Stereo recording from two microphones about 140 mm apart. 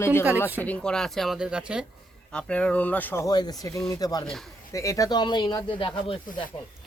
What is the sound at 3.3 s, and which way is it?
Speech, 30° left (ahead or behind).